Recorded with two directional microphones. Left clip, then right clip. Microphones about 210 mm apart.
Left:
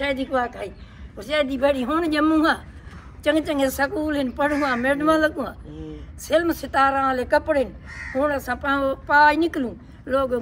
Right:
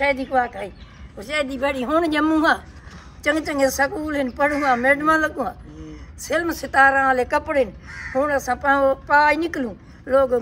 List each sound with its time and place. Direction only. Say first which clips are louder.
0.0 s a woman's voice: right 3 dB; 5° right (ahead or behind)